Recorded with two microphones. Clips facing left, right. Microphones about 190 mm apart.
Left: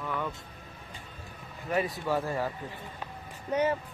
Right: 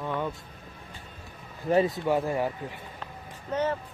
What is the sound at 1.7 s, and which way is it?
Speech, 20° right (ahead or behind).